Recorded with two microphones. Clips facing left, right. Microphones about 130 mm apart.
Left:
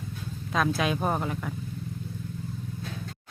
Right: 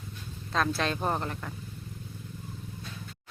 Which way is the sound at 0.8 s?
5° left (ahead or behind).